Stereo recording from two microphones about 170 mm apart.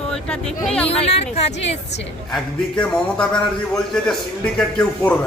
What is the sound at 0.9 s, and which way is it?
Speech, 35° left (ahead or behind).